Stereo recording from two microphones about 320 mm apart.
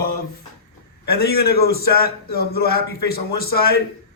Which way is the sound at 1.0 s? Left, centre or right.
Left.